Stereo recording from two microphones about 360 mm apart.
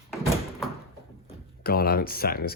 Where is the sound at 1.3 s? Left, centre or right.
Left.